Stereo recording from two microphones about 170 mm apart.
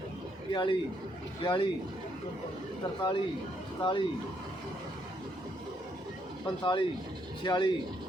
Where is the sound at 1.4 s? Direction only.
30° left (ahead or behind).